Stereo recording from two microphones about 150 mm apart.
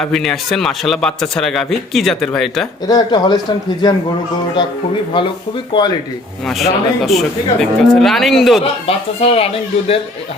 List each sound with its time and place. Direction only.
0.0 s speech: centre (ahead or behind)
2.8 s speech: 25° left (ahead or behind)
5.1 s speech: 35° left (ahead or behind)
6.4 s speech: centre (ahead or behind)
9.2 s speech: 40° left (ahead or behind)